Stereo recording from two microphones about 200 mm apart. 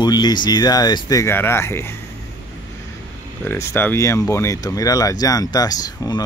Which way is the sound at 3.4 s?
10° left (ahead or behind).